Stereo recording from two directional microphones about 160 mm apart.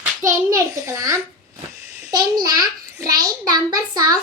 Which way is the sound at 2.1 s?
25° right (ahead or behind).